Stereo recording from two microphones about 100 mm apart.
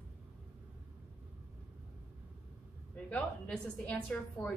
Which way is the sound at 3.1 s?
15° left (ahead or behind).